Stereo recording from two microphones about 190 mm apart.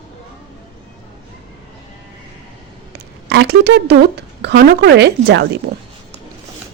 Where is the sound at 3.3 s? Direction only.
60° right (ahead or behind).